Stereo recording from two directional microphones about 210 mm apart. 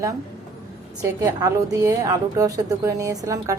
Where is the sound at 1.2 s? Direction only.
15° right (ahead or behind).